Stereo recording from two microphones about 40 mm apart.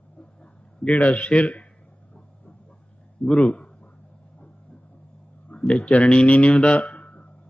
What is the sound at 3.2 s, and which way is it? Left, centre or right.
Speech, centre.